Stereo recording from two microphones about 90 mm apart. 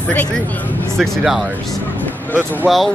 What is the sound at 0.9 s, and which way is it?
Speech, centre (ahead or behind).